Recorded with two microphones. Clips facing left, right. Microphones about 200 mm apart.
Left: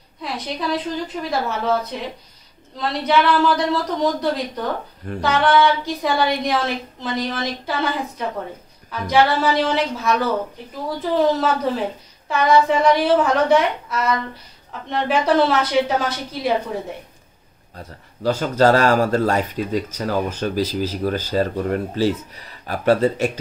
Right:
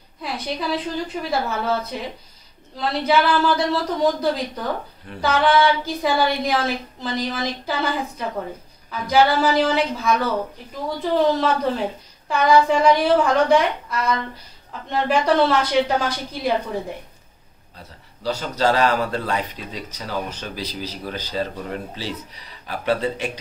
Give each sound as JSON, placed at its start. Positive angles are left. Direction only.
{"t": 0.2, "sound": "a woman's voice", "side_deg": 0}
{"t": 18.2, "sound": "speech", "side_deg": 50}